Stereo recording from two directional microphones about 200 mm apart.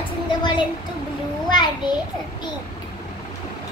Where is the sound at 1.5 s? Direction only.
20° left (ahead or behind).